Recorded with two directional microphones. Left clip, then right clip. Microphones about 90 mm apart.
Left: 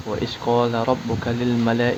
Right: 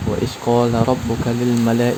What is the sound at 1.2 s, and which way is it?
Speech, 40° right (ahead or behind).